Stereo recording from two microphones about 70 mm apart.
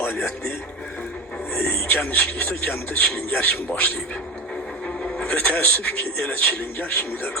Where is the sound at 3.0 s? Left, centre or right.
Centre.